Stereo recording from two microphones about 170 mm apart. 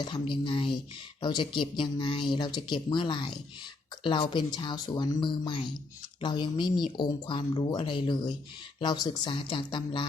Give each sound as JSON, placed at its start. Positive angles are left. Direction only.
{"t": 0.0, "sound": "speech", "side_deg": 30}